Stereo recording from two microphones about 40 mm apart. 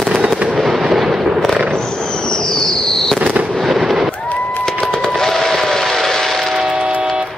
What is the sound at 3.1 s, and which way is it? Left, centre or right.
Fireworks, right.